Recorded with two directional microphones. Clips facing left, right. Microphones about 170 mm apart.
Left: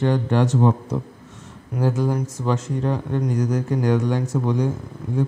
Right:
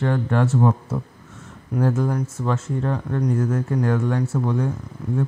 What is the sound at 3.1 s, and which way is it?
Speech, 20° left (ahead or behind).